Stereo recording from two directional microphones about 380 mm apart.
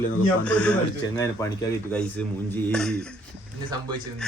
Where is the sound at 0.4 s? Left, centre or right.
Centre.